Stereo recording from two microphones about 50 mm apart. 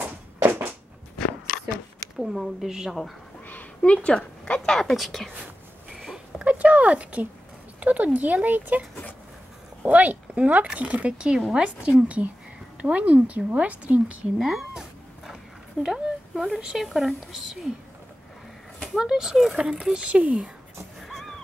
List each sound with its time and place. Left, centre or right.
0.0 s a sound: right
2.1 s speech: centre
3.4 s a sound: left
4.5 s speech: centre
4.9 s speech: centre
6.1 s a sound: right
7.8 s speech: right
9.8 s speech: right
14.4 s speech: centre
14.7 s a sound: centre
15.8 s speech: centre
18.9 s speech: centre
21.0 s vehicle: centre